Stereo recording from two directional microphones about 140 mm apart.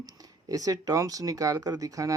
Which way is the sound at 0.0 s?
25° right (ahead or behind).